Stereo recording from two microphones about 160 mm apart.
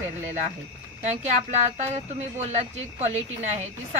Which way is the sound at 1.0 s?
45° right (ahead or behind).